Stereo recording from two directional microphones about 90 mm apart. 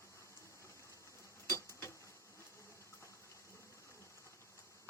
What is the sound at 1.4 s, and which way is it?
Tick-tock, 30° left (ahead or behind).